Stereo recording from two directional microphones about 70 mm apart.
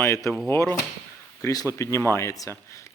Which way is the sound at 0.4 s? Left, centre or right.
Left.